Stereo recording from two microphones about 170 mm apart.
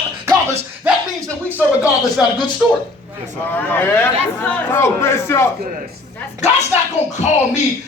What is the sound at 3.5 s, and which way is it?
A man's voice, 10° left (ahead or behind).